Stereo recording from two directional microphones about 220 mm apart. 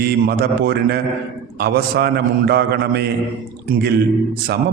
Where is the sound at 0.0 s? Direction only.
45° right (ahead or behind).